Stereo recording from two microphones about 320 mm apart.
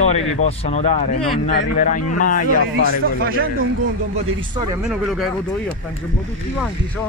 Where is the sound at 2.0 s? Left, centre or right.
Left.